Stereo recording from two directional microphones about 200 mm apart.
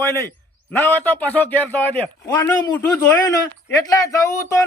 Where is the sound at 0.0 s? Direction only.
15° left (ahead or behind).